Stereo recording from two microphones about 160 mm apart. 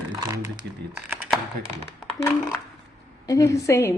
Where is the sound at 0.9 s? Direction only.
5° right (ahead or behind).